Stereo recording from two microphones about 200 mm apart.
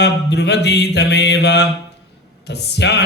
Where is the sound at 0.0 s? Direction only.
55° left (ahead or behind).